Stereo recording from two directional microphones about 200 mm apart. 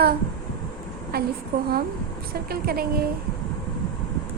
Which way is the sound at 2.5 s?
50° right (ahead or behind).